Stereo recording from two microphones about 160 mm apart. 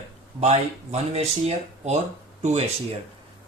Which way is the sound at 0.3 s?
40° right (ahead or behind).